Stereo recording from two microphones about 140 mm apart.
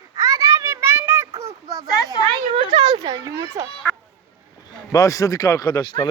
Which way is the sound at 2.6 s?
35° right (ahead or behind).